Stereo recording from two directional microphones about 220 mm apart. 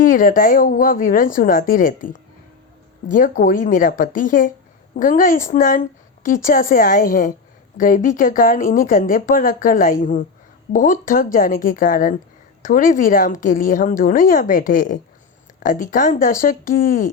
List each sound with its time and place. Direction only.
0.0 s speech: 40° left (ahead or behind)